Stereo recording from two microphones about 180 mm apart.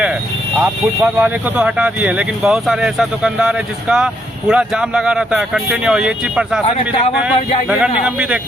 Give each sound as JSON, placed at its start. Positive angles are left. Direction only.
{"t": 0.6, "sound": "speech", "side_deg": -10}
{"t": 6.7, "sound": "speech", "side_deg": 35}
{"t": 7.7, "sound": "speech", "side_deg": -5}